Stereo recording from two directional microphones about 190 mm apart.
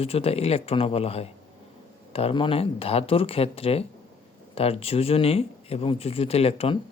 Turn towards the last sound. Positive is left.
turn(degrees=30)  # may be behind; listen again after turning